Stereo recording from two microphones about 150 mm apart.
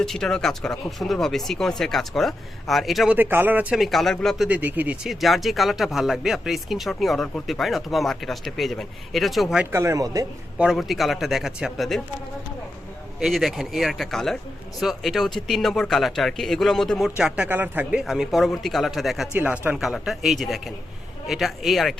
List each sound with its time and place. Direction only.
0.0 s speech: 5° left (ahead or behind)
3.2 s speech: 15° right (ahead or behind)
4.4 s speech: 10° right (ahead or behind)
5.0 s speech: centre (ahead or behind)
9.7 s speech: 20° right (ahead or behind)
10.6 s speech: centre (ahead or behind)
13.1 s speech: centre (ahead or behind)
18.0 s speech: centre (ahead or behind)
19.4 s speech: 10° right (ahead or behind)